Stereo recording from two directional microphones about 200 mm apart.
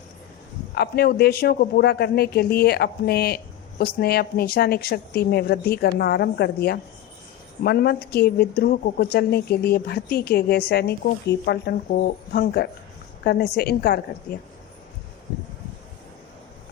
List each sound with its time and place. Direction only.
0.8 s speech: 55° left (ahead or behind)